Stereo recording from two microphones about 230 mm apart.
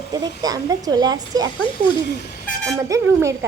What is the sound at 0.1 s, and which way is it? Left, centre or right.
A woman's voice, centre.